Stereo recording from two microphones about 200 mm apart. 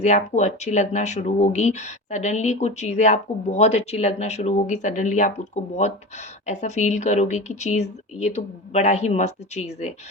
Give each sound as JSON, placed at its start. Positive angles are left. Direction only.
{"t": 0.0, "sound": "speech", "side_deg": 35}
{"t": 6.4, "sound": "speech", "side_deg": 35}